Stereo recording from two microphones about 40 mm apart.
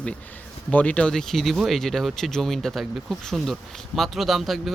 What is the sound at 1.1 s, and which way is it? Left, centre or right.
Speech, centre.